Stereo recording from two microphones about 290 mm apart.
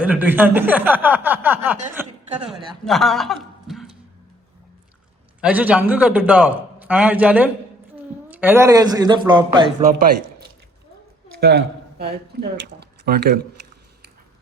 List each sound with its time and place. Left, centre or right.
0.0 s speech: centre
5.4 s a man's voice: centre
11.3 s speech: right